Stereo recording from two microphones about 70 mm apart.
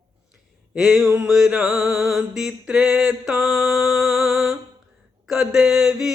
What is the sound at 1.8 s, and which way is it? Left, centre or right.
Music, centre.